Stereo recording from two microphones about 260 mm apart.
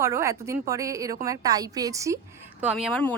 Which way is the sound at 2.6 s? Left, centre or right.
Centre.